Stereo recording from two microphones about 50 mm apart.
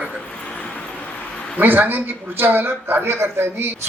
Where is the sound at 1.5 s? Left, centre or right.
Right.